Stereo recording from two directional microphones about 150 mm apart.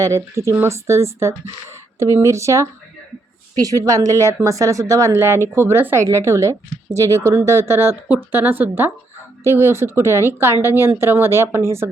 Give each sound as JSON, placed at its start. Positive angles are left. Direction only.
{"t": 0.0, "sound": "a woman's voice", "side_deg": -20}